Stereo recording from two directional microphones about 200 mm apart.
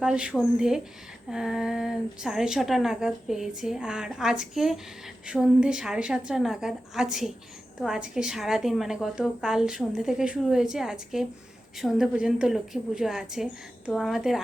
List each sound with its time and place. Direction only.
0.0 s speech: 5° right (ahead or behind)